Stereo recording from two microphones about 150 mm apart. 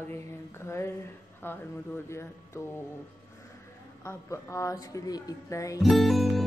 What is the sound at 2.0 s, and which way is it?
Speech, 20° left (ahead or behind).